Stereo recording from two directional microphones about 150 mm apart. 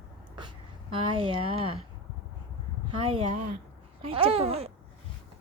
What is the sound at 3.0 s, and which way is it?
A woman's voice, 45° right (ahead or behind).